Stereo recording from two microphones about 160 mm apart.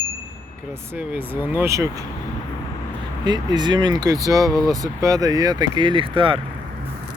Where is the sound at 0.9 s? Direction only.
10° right (ahead or behind).